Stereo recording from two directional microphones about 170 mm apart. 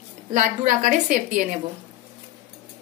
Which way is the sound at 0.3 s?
50° right (ahead or behind).